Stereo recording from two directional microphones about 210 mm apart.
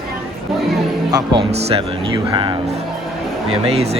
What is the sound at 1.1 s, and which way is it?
Speech, 25° right (ahead or behind).